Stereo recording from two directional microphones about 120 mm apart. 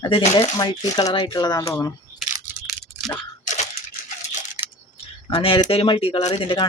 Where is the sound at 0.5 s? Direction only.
35° left (ahead or behind).